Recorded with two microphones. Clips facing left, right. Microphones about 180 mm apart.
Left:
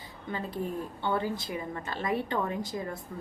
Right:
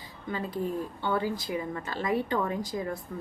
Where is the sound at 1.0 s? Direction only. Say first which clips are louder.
Left 1 dB; 20° left (ahead or behind).